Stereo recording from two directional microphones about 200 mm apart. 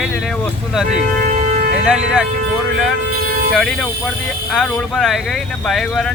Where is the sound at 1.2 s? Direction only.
45° right (ahead or behind).